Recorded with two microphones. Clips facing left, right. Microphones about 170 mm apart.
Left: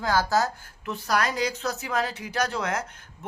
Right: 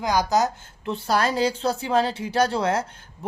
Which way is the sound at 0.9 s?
30° right (ahead or behind).